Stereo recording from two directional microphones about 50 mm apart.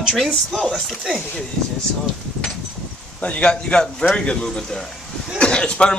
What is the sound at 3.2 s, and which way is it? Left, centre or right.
A man's voice, left.